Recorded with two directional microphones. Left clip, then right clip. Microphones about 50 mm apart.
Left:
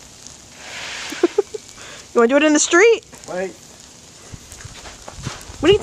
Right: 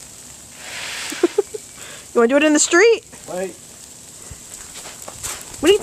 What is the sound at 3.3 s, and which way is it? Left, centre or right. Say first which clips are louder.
Speech: left 1 dB; right.